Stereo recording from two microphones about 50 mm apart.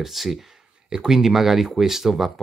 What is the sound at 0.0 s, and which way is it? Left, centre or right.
Speech, centre.